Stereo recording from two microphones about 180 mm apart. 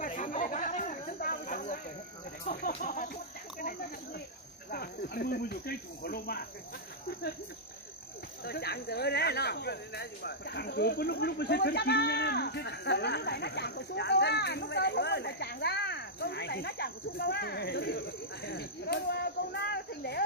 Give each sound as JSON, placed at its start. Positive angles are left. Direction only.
{"t": 0.0, "sound": "snake", "side_deg": 45}
{"t": 2.4, "sound": "speech", "side_deg": 50}
{"t": 8.5, "sound": "speech", "side_deg": 60}